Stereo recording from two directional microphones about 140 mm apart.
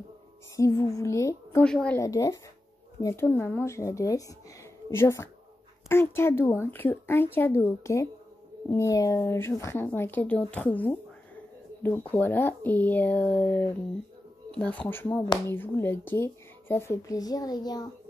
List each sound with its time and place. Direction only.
0.6 s a woman's voice: 20° left (ahead or behind)
1.6 s speech: 5° left (ahead or behind)
2.0 s a woman's voice: 20° left (ahead or behind)
12.1 s a woman's voice: 15° left (ahead or behind); by 17.8 s 30° left (ahead or behind)